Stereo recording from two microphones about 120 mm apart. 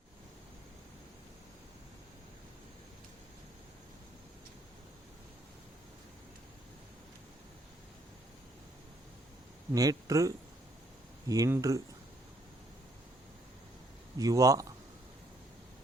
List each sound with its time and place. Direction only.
9.7 s speech: 30° right (ahead or behind)
14.2 s speech: 30° right (ahead or behind)